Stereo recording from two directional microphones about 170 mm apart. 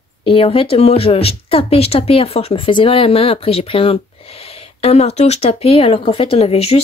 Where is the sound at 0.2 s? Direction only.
30° left (ahead or behind).